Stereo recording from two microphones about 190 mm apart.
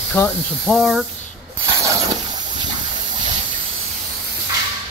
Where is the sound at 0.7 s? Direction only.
Centre (ahead or behind).